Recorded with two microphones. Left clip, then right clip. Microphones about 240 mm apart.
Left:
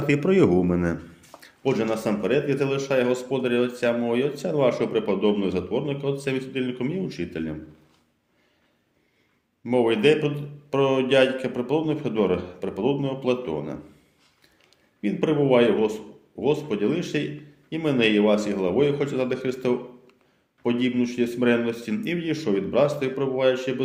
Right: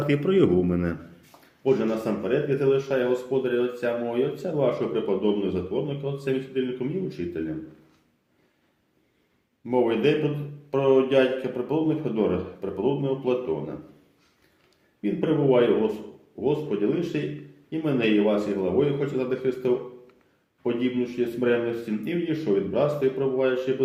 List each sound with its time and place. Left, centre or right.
0.1 s speech: left
1.6 s a man's voice: left
9.6 s a man's voice: left
15.0 s a man's voice: left